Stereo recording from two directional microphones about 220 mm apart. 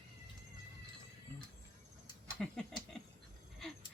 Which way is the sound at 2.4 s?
Centre (ahead or behind).